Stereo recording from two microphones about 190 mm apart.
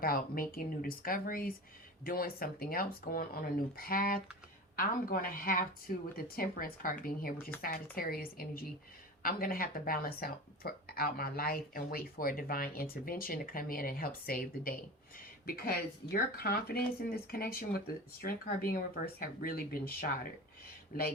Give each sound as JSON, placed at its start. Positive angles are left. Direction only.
{"t": 0.0, "sound": "speech", "side_deg": 50}